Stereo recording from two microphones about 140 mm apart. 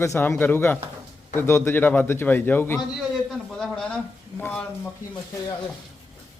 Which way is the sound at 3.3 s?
5° left (ahead or behind).